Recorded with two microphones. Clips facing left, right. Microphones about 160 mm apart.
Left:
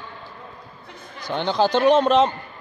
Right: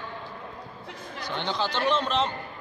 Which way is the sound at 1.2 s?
45° left (ahead or behind).